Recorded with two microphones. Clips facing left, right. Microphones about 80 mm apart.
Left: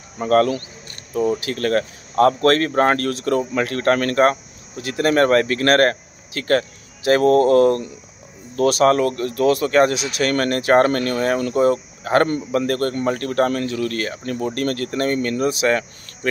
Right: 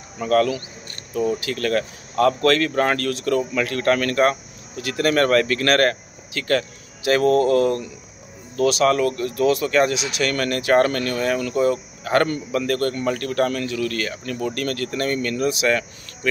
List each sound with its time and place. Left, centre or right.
0.2 s speech: left